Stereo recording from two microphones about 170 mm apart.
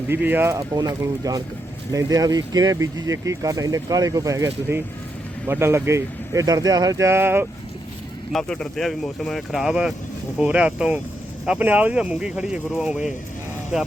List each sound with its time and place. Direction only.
0.1 s speech: 10° right (ahead or behind)
8.3 s speech: 5° left (ahead or behind)